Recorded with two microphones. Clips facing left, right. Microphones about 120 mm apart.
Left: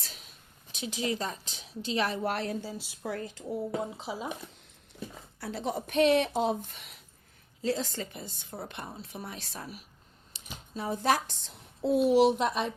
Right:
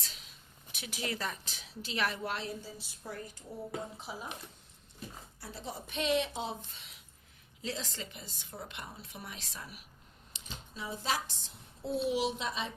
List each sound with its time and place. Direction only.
0.7 s a woman's voice: 25° left (ahead or behind)
2.2 s speech: 55° left (ahead or behind); by 4.3 s 90° left
5.4 s a woman's voice: 75° left (ahead or behind); by 6.9 s 55° left (ahead or behind)
7.6 s a woman's voice: 35° left (ahead or behind)
10.8 s a woman's voice: 55° left (ahead or behind)
11.9 s speech: 45° left (ahead or behind)